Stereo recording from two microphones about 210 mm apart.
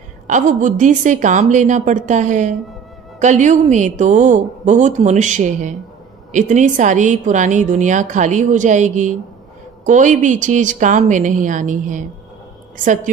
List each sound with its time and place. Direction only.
0.3 s a woman's voice: 35° right (ahead or behind)